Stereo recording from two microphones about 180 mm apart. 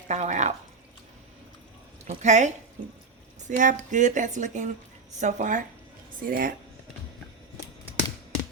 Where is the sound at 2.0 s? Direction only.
40° right (ahead or behind).